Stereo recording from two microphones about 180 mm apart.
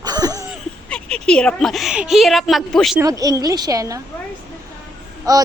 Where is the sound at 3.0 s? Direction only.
20° right (ahead or behind).